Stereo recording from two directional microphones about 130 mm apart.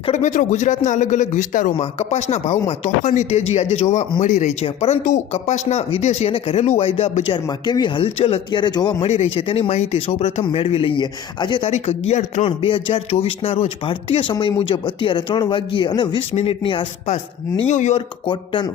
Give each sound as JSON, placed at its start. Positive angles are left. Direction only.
{"t": 0.1, "sound": "speech", "side_deg": 70}
{"t": 1.8, "sound": "speech", "side_deg": 55}
{"t": 4.2, "sound": "speech", "side_deg": 70}
{"t": 4.6, "sound": "speech", "side_deg": 55}
{"t": 7.4, "sound": "speech", "side_deg": 35}
{"t": 9.0, "sound": "speech", "side_deg": 60}
{"t": 11.7, "sound": "speech", "side_deg": 55}
{"t": 16.3, "sound": "speech", "side_deg": 50}
{"t": 17.7, "sound": "speech", "side_deg": 65}
{"t": 18.3, "sound": "speech", "side_deg": 35}